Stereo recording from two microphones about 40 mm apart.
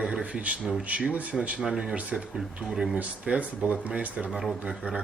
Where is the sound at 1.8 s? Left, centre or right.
Right.